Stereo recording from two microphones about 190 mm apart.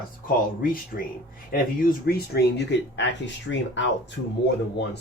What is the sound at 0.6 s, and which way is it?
Speech, 45° left (ahead or behind).